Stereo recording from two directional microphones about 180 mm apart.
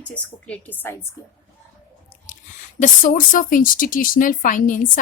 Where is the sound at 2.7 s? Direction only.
45° left (ahead or behind).